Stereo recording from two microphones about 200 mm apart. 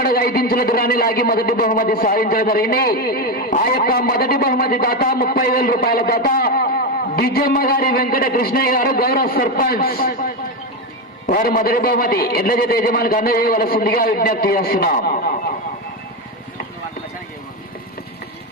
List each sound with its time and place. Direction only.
0.0 s speech: 50° left (ahead or behind)